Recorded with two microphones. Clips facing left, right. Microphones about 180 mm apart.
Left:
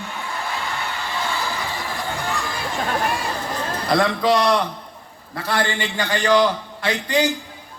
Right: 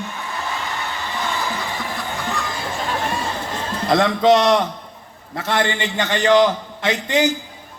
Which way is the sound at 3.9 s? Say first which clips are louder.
Right 4 dB; 20° right (ahead or behind).